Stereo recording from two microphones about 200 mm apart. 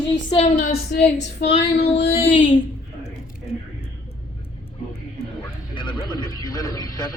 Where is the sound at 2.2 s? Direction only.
40° left (ahead or behind).